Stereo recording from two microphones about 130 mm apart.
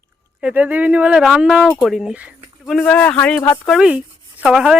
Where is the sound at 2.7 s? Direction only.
10° left (ahead or behind).